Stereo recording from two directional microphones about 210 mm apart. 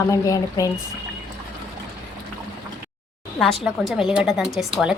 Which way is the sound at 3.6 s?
Centre (ahead or behind).